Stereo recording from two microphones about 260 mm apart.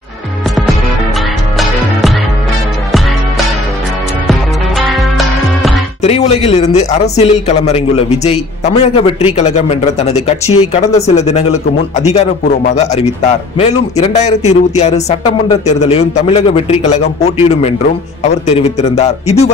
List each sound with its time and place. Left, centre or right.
1.6 s music: centre
4.3 s music: centre
6.0 s a man's voice: left